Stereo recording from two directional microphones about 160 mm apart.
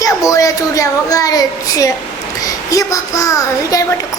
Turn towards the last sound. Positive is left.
turn(degrees=20)  # may be behind; listen again after turning